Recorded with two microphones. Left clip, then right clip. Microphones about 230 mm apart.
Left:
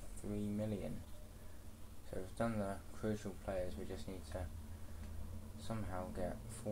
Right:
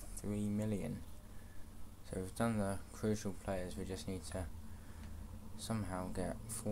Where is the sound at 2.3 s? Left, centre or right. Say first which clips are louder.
Right 2 dB; right.